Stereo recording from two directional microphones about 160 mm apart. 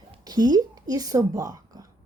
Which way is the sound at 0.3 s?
25° right (ahead or behind).